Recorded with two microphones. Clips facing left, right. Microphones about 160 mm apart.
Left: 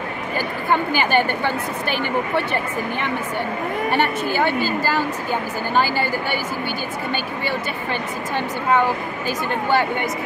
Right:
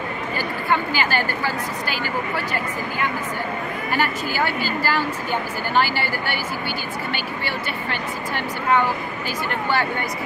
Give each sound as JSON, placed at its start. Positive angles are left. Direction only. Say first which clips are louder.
{"t": 0.7, "sound": "a woman's voice", "louder": "left 2 dB", "side_deg": 20}
{"t": 3.9, "sound": "a woman's voice", "louder": "left 2 dB", "side_deg": 20}
{"t": 9.7, "sound": "speech", "louder": "left 4 dB", "side_deg": 15}